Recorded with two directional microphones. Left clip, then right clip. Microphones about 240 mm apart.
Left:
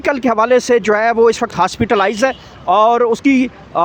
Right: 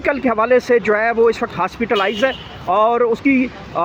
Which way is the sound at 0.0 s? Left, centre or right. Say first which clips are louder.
Left 3 dB; left.